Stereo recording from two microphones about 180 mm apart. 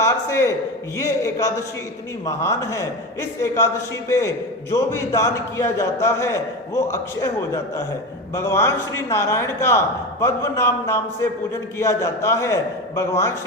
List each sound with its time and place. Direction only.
0.0 s a man's voice: 15° left (ahead or behind)
4.7 s a man's voice: 15° left (ahead or behind)